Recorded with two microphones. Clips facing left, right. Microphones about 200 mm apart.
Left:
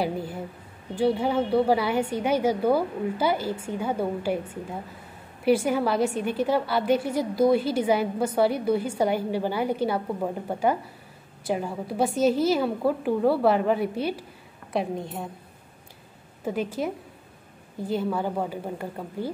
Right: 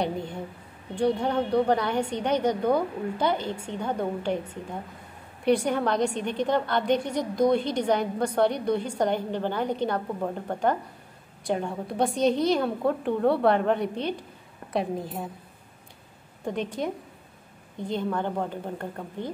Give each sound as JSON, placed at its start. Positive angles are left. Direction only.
{"t": 0.0, "sound": "a woman's voice", "side_deg": 5}
{"t": 16.4, "sound": "a woman's voice", "side_deg": 5}